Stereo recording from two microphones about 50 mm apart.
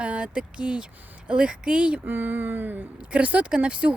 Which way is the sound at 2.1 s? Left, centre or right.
Right.